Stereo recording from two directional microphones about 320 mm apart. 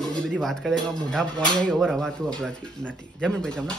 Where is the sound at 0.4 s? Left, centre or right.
Centre.